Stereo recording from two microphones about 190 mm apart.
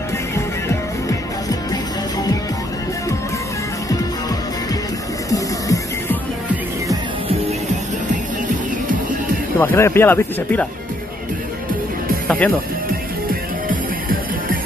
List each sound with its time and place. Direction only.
0.7 s music: 15° left (ahead or behind)
5.3 s music: 15° left (ahead or behind)
9.6 s speech: 10° left (ahead or behind)
12.3 s speech: 10° left (ahead or behind)
13.3 s music: 45° right (ahead or behind)